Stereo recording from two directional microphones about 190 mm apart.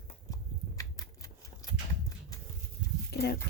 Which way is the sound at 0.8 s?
20° left (ahead or behind).